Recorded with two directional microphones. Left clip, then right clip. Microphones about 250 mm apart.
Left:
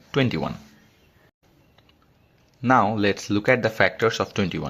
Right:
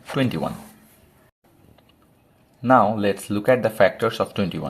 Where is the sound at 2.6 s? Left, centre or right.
Left.